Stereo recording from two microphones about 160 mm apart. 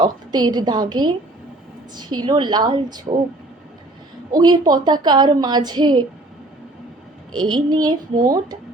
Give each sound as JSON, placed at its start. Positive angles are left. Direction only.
{"t": 0.0, "sound": "a woman's voice", "side_deg": -25}
{"t": 4.3, "sound": "a woman's voice", "side_deg": -25}
{"t": 7.3, "sound": "a woman's voice", "side_deg": -30}